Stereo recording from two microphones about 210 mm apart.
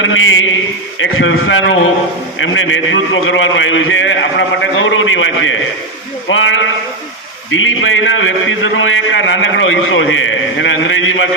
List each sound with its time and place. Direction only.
0.0 s a man's voice: 70° left (ahead or behind)